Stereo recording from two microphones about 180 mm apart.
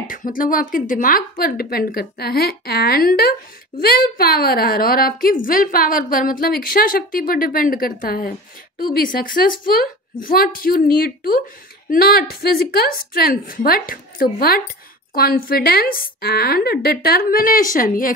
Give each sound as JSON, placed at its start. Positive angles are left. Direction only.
{"t": 0.0, "sound": "a woman's voice", "side_deg": 50}